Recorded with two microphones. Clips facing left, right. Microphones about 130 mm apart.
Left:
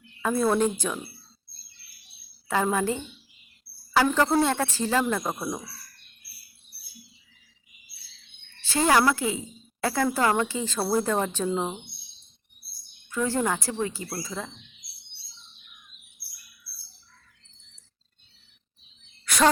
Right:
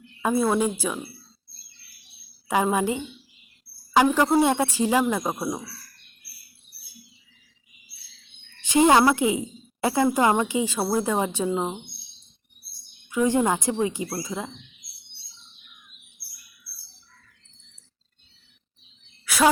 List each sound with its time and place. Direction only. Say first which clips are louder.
0.2 s speech: right 1 dB; 10° right (ahead or behind)
2.5 s speech: right 2 dB; 15° right (ahead or behind)
8.6 s speech: right 4 dB; 20° right (ahead or behind)
13.1 s speech: right 5 dB; 15° right (ahead or behind)
19.2 s a sound: right 1 dB; 5° right (ahead or behind)